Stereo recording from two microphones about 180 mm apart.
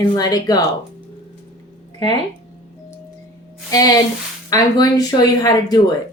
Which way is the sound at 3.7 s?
20° left (ahead or behind).